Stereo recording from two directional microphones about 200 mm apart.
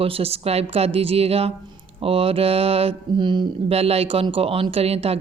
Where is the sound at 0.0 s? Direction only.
30° right (ahead or behind).